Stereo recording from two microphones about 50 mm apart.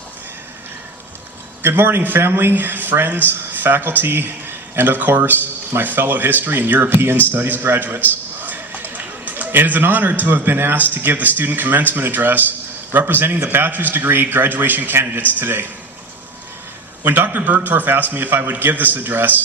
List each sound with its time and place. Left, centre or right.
1.6 s speech: right
6.9 s a man's voice: right
17.0 s speech: right